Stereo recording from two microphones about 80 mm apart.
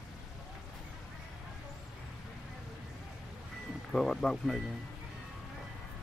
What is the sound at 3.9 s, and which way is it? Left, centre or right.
Speech, centre.